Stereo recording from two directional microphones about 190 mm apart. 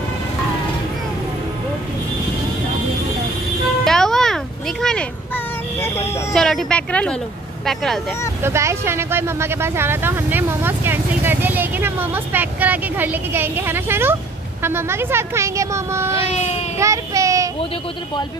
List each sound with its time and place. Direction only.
3.8 s music: centre (ahead or behind)
5.8 s speech: 10° left (ahead or behind)
8.4 s speech: 15° right (ahead or behind)
16.2 s speech: 35° left (ahead or behind)
16.7 s speech: 15° right (ahead or behind)